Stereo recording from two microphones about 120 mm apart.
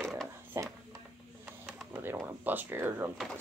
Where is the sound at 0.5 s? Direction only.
25° right (ahead or behind).